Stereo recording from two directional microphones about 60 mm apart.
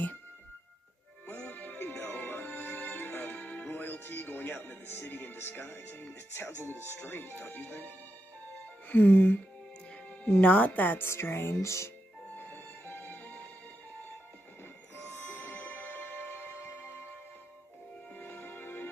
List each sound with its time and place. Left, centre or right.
1.2 s music: left
1.8 s music: left
8.8 s speech: left
10.4 s speech: left
11.1 s speech: left
12.4 s music: left
15.3 s music: left
18.1 s music: left